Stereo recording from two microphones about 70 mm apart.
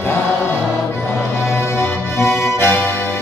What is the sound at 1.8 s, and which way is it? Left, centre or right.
Music, left.